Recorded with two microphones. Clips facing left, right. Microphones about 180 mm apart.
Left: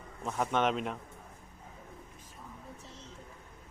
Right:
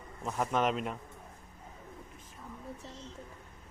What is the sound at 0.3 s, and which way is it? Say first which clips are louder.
Speech: even; centre (ahead or behind).